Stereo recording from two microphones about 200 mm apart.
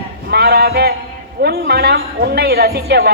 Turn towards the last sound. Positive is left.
turn(degrees=-55)  # may be behind; listen again after turning